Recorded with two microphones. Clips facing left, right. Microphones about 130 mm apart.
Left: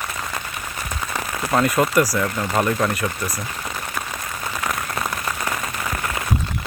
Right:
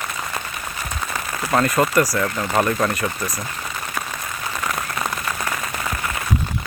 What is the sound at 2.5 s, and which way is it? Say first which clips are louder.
Speech: right 1 dB; centre (ahead or behind).